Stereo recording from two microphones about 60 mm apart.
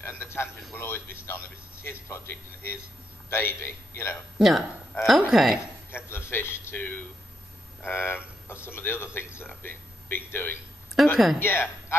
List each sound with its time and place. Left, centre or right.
0.0 s a man's voice: left
4.4 s a woman's voice: centre
5.9 s a man's voice: left
7.8 s speech: left
11.0 s speech: centre
11.3 s speech: left